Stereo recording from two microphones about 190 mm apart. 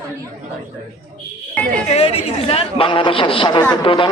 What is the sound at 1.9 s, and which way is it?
A man's voice, 30° left (ahead or behind).